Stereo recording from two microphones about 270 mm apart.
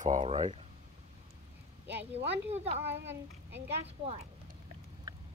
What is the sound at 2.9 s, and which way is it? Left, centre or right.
Speech, right.